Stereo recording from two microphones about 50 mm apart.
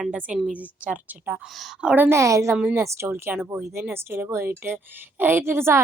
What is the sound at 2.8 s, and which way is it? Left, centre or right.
Speech, right.